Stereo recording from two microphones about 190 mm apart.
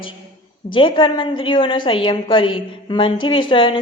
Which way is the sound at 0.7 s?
25° left (ahead or behind).